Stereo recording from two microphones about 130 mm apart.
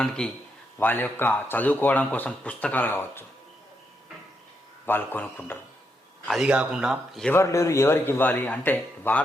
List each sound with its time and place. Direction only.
0.2 s speech: 5° left (ahead or behind)
4.9 s speech: 15° left (ahead or behind)
6.2 s speech: centre (ahead or behind)
7.3 s speech: 25° left (ahead or behind)